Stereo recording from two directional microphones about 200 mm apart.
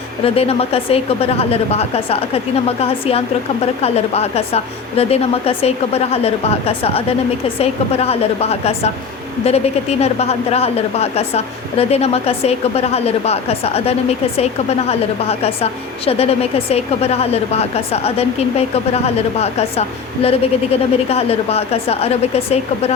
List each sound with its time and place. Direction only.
0.3 s a woman's voice: 30° left (ahead or behind)